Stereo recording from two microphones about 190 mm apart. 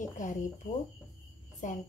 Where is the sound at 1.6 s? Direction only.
40° left (ahead or behind).